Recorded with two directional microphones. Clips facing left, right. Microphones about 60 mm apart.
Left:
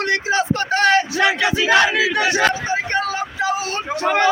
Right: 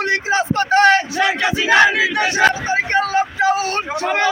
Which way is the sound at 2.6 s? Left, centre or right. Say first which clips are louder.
Right 3 dB; right.